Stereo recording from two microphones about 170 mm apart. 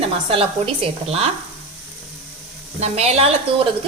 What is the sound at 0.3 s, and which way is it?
Speech, 35° right (ahead or behind).